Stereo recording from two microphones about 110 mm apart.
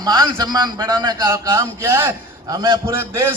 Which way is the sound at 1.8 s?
20° right (ahead or behind).